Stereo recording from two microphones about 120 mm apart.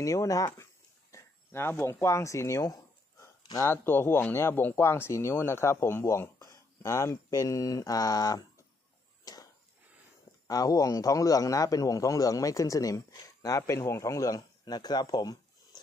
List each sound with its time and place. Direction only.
0.0 s speech: 25° left (ahead or behind)
9.2 s a sound: 30° left (ahead or behind)
10.4 s speech: 30° left (ahead or behind)